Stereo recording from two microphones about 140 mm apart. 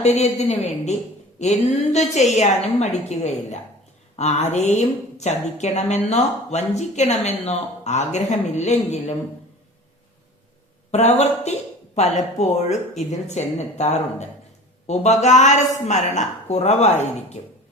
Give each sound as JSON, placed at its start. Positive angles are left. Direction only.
{"t": 0.0, "sound": "a woman's voice", "side_deg": 55}
{"t": 10.9, "sound": "a woman's voice", "side_deg": 50}